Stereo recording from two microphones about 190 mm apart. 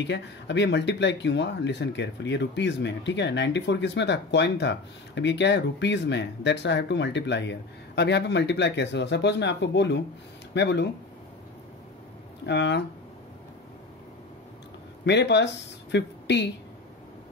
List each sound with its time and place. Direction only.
0.0 s speech: 70° left (ahead or behind)
12.4 s speech: 65° left (ahead or behind)
15.0 s speech: 65° left (ahead or behind)